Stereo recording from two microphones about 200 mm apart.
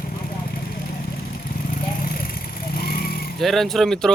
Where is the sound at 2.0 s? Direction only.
45° left (ahead or behind).